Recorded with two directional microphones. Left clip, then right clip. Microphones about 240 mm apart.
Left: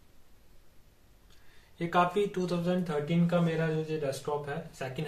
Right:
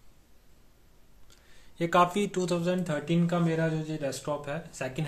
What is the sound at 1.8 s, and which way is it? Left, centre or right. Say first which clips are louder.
Speech: right 3 dB; right.